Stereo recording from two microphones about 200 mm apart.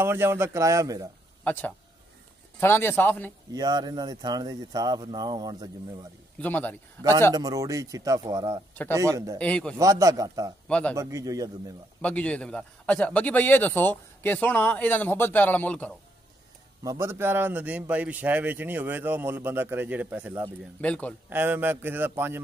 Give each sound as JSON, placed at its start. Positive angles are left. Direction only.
{"t": 0.0, "sound": "a man's voice", "side_deg": -10}
{"t": 1.4, "sound": "a man's voice", "side_deg": 10}
{"t": 3.5, "sound": "speech", "side_deg": -20}
{"t": 6.4, "sound": "a man's voice", "side_deg": 10}
{"t": 7.3, "sound": "a man's voice", "side_deg": -20}
{"t": 9.4, "sound": "a man's voice", "side_deg": 5}
{"t": 9.8, "sound": "a man's voice", "side_deg": -15}
{"t": 10.7, "sound": "a man's voice", "side_deg": 5}
{"t": 11.0, "sound": "a man's voice", "side_deg": -15}
{"t": 12.0, "sound": "a man's voice", "side_deg": 5}
{"t": 16.8, "sound": "a man's voice", "side_deg": -15}
{"t": 20.8, "sound": "a man's voice", "side_deg": 5}
{"t": 21.3, "sound": "a man's voice", "side_deg": -10}